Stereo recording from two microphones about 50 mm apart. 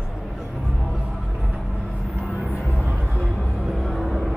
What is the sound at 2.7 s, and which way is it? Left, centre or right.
Music, right.